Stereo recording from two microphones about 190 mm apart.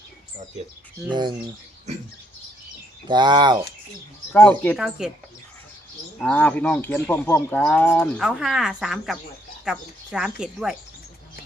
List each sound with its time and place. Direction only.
1.1 s speech: 25° right (ahead or behind)
3.1 s speech: 25° right (ahead or behind)
4.3 s speech: 10° left (ahead or behind)
4.8 s a woman's voice: 5° right (ahead or behind)
6.1 s a woman's voice: 5° left (ahead or behind)